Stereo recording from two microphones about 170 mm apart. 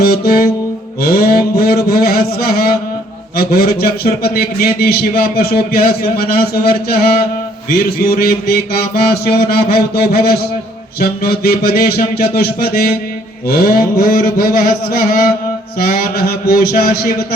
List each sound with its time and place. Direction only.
0.0 s music: 65° left (ahead or behind)
1.0 s a sound: 65° left (ahead or behind)
3.3 s a man's voice: 65° left (ahead or behind)